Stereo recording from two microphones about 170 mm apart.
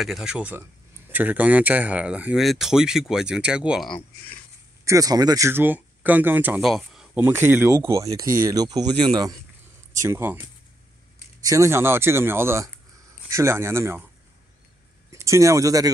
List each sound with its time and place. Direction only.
0.0 s speech: centre (ahead or behind)
4.8 s speech: 20° right (ahead or behind); by 7.1 s centre (ahead or behind)
7.2 s speech: 15° right (ahead or behind)
11.4 s speech: 20° right (ahead or behind)
15.0 s speech: 15° right (ahead or behind)